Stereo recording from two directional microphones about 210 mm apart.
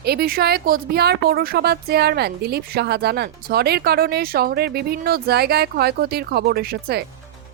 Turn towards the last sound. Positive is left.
turn(degrees=-50)  # may be behind; listen again after turning